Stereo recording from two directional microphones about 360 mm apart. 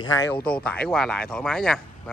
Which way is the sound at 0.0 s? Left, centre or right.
Centre.